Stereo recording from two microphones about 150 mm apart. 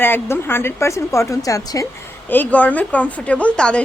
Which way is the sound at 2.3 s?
10° left (ahead or behind).